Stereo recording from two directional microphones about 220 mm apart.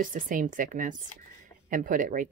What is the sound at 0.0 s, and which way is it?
Speech, 40° right (ahead or behind).